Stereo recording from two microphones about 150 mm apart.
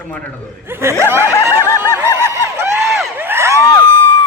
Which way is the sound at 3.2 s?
15° right (ahead or behind).